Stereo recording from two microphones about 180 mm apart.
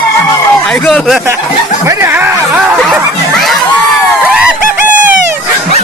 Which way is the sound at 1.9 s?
15° right (ahead or behind).